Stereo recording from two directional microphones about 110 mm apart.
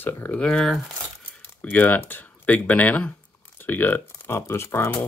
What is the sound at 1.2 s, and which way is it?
Speech, 15° left (ahead or behind).